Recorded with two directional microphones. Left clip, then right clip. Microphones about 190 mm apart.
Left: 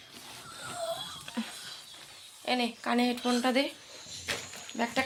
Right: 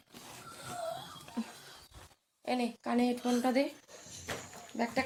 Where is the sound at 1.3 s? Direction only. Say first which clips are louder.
Left 4 dB; centre (ahead or behind).